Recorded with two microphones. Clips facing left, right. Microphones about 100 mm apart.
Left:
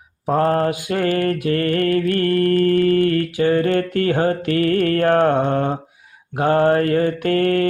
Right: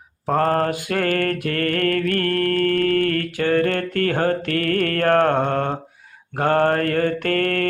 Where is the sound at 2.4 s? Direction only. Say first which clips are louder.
Left 4 dB; 70° right (ahead or behind).